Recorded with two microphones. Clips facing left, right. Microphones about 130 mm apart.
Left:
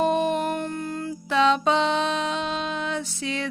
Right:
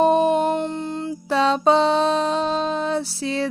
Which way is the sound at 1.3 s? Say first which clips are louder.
Right 3 dB; 35° right (ahead or behind).